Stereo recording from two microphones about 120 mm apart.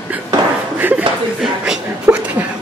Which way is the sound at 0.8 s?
15° right (ahead or behind).